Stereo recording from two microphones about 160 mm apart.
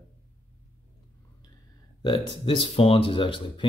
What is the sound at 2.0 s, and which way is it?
Speech, 30° left (ahead or behind).